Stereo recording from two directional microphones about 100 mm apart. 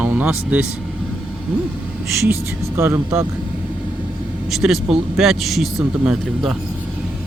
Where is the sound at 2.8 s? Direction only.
25° right (ahead or behind).